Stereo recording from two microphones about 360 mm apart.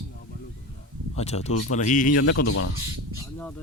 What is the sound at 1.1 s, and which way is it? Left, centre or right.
Speech, centre.